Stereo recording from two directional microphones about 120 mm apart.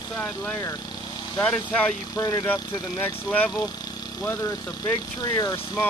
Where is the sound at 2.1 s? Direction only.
30° left (ahead or behind).